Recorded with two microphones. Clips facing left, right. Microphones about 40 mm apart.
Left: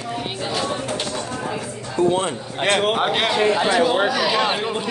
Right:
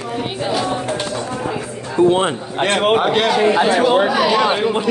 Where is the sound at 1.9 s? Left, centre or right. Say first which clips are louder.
Right 5 dB; right.